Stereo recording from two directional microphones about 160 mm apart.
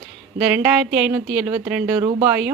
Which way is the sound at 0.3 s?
10° right (ahead or behind).